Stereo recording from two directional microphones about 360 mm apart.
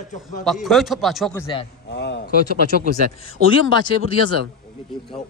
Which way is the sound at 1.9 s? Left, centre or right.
Left.